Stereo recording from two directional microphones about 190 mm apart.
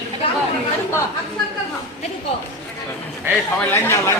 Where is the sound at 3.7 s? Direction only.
15° left (ahead or behind).